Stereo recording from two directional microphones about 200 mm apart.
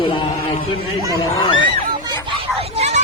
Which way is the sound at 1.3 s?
25° left (ahead or behind).